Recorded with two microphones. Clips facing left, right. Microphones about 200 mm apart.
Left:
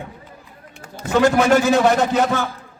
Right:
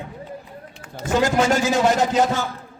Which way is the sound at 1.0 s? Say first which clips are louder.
Left 3 dB; 60° left (ahead or behind).